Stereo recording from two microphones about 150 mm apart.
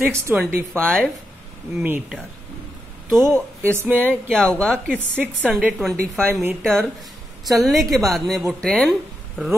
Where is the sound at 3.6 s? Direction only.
15° right (ahead or behind).